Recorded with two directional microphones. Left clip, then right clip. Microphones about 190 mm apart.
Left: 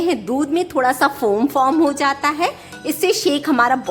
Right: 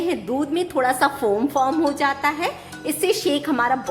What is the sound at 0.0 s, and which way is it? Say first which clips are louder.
A woman's voice: left 4 dB; 30° left (ahead or behind).